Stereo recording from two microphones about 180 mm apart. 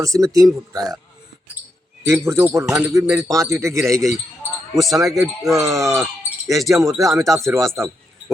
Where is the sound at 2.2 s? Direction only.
15° right (ahead or behind).